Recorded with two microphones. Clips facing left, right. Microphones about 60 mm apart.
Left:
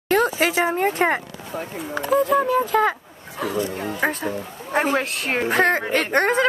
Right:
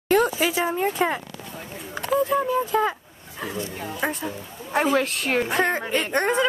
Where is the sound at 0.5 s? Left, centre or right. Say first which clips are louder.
Left 3 dB; left.